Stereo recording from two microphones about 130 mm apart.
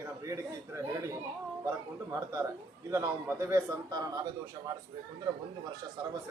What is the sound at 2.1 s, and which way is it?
A man's voice, 25° right (ahead or behind).